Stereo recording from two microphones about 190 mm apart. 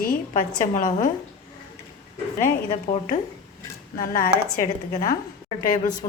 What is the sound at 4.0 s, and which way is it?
A woman's voice, 45° left (ahead or behind).